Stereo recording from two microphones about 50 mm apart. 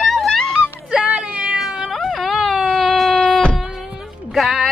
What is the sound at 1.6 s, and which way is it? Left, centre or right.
Cat, centre.